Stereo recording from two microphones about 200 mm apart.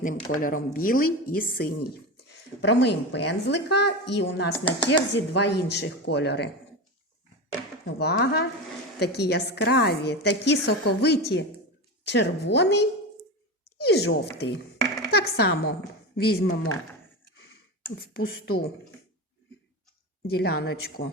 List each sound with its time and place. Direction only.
0.3 s speech: 45° left (ahead or behind)
2.2 s speech: 60° left (ahead or behind)
7.9 s a woman's voice: 55° left (ahead or behind)
17.9 s speech: 50° left (ahead or behind)
20.2 s speech: 50° left (ahead or behind)